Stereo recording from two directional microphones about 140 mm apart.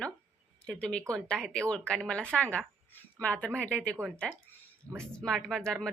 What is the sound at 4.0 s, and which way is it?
Speech, 20° right (ahead or behind).